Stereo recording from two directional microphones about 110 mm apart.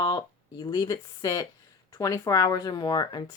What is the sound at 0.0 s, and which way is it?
Speech, 40° left (ahead or behind).